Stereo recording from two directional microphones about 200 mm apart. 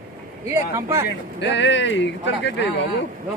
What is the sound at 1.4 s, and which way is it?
Speech, 65° left (ahead or behind).